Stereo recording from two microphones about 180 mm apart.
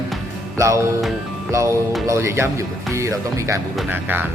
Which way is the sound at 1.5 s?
15° right (ahead or behind).